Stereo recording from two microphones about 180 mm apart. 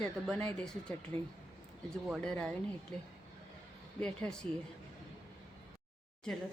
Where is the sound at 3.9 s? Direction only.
5° left (ahead or behind).